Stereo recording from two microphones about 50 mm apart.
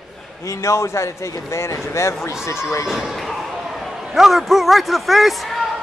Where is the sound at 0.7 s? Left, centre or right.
Left.